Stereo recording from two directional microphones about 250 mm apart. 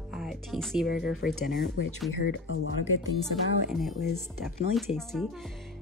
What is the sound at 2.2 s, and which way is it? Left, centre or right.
Speech, left.